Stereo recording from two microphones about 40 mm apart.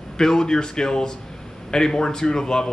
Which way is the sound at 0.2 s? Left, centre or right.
Centre.